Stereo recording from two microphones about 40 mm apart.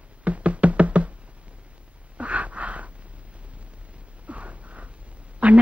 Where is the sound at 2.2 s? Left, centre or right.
Right.